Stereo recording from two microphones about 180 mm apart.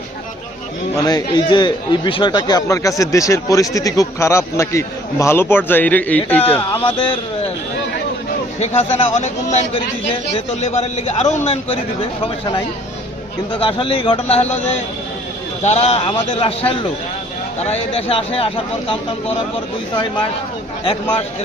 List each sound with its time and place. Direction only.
1.0 s speech: 25° left (ahead or behind)
6.7 s a man's voice: 30° left (ahead or behind)
8.5 s a man's voice: 35° left (ahead or behind)
13.5 s speech: 30° left (ahead or behind)
15.6 s a man's voice: 35° left (ahead or behind)
20.8 s speech: 30° left (ahead or behind)